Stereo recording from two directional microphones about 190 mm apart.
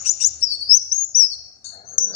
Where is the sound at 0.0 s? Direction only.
35° left (ahead or behind).